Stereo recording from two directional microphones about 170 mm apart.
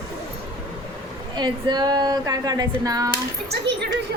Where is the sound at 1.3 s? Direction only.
25° right (ahead or behind).